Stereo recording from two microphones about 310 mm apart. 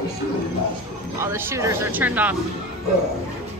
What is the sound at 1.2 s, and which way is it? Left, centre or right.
A woman's voice, centre.